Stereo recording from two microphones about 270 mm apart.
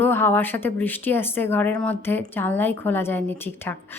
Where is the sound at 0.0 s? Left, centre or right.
Centre.